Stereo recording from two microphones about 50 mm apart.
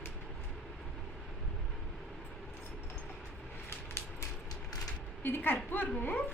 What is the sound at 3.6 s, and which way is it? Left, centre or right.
Vehicle, left.